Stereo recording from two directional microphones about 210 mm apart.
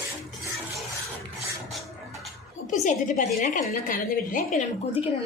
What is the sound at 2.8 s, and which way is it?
A woman's voice, 35° left (ahead or behind).